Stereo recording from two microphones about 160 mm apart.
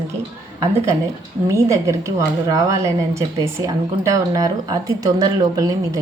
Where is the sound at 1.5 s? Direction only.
20° right (ahead or behind).